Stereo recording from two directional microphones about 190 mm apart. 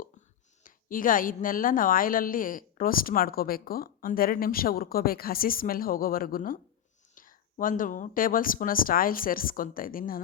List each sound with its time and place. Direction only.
0.6 s a woman's voice: 45° left (ahead or behind)